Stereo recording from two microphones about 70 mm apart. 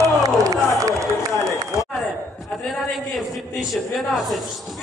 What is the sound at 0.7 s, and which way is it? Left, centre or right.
Run, right.